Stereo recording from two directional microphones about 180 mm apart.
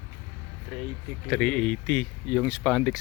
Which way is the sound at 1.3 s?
5° left (ahead or behind).